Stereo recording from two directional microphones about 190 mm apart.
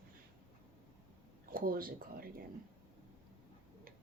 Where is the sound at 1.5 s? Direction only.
50° right (ahead or behind).